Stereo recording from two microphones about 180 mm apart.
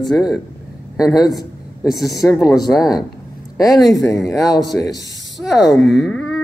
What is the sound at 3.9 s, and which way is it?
Speech, 15° left (ahead or behind).